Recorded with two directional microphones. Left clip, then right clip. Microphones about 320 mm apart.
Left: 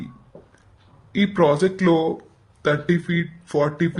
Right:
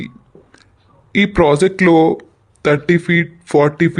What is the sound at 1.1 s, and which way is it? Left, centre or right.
Speech, right.